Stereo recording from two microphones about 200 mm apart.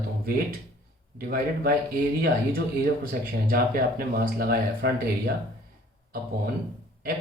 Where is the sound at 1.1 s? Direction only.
45° right (ahead or behind).